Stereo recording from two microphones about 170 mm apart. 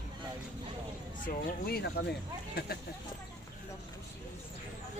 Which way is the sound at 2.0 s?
70° left (ahead or behind).